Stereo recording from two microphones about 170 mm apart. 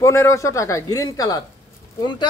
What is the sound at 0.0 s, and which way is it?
Speech, 15° left (ahead or behind).